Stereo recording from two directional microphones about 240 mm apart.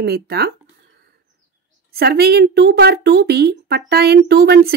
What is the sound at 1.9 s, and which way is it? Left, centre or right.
Speech, right.